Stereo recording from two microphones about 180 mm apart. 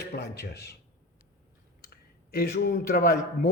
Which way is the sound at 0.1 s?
65° left (ahead or behind).